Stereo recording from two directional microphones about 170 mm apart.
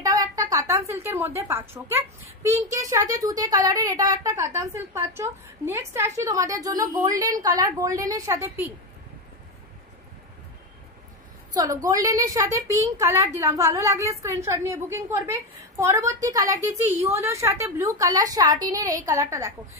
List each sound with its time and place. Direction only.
0.0 s a woman's voice: 20° right (ahead or behind)
11.5 s a woman's voice: 20° right (ahead or behind)